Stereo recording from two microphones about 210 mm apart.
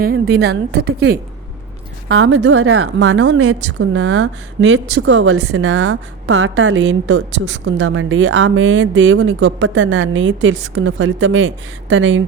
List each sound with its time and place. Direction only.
0.0 s a woman's voice: 50° right (ahead or behind)
2.0 s a woman's voice: 75° right (ahead or behind)
3.2 s a woman's voice: 65° right (ahead or behind)